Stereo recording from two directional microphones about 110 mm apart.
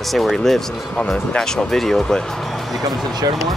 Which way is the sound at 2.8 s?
35° right (ahead or behind).